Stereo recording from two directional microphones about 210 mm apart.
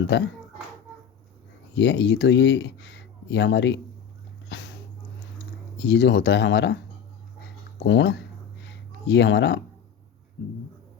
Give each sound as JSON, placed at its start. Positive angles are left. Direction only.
{"t": 0.1, "sound": "speech", "side_deg": 55}
{"t": 1.7, "sound": "speech", "side_deg": 55}
{"t": 4.4, "sound": "a sound", "side_deg": 60}
{"t": 5.8, "sound": "speech", "side_deg": 55}
{"t": 7.8, "sound": "speech", "side_deg": 60}
{"t": 8.6, "sound": "a sound", "side_deg": 55}